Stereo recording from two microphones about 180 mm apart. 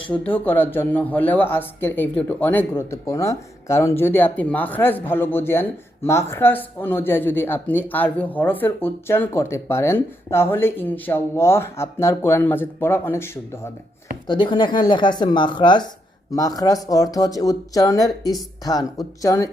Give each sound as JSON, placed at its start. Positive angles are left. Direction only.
{"t": 0.1, "sound": "speech", "side_deg": 10}
{"t": 14.3, "sound": "speech", "side_deg": 25}